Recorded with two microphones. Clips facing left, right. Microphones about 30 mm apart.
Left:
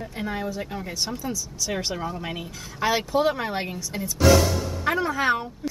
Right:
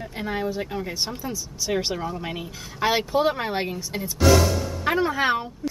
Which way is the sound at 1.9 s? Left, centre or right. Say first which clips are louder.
Right 1 dB; centre.